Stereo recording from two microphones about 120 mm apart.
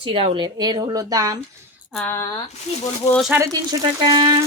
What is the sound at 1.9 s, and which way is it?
Speech, 20° left (ahead or behind).